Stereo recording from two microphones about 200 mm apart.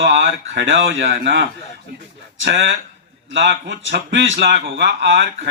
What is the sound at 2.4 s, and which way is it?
Speech, 65° right (ahead or behind).